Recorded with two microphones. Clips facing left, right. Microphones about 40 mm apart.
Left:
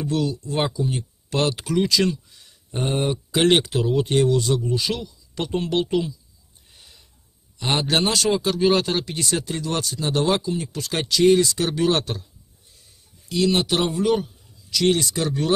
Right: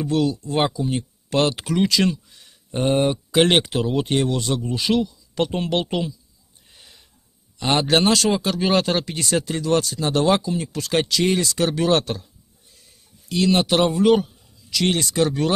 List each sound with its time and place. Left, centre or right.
0.1 s speech: right
0.5 s speech: right
1.3 s speech: right
7.7 s speech: right
13.3 s speech: right